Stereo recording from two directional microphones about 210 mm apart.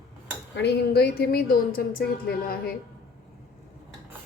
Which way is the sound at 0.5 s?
50° left (ahead or behind).